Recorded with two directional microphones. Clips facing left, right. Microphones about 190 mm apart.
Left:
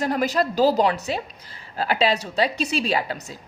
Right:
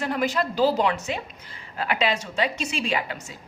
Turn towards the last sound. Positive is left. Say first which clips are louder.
# left 3 dB
turn(degrees=35)  # may be behind; listen again after turning